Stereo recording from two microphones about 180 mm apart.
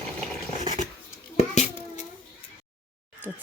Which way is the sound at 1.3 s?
40° left (ahead or behind).